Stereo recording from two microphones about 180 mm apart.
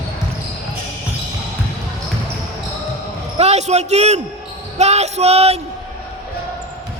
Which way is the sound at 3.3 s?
35° right (ahead or behind).